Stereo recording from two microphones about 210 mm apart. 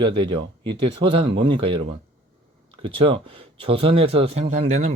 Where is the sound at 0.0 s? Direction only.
25° right (ahead or behind).